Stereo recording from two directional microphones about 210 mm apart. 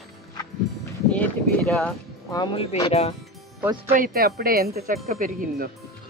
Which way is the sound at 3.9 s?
45° right (ahead or behind).